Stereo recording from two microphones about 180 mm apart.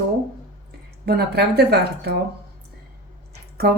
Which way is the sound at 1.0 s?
60° right (ahead or behind).